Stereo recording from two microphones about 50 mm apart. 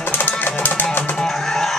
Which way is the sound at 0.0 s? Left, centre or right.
Left.